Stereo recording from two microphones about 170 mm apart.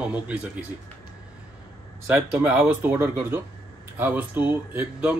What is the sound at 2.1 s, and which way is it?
Speech, 10° right (ahead or behind).